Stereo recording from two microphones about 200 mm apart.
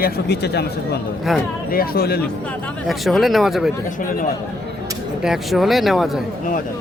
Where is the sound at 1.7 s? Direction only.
50° left (ahead or behind).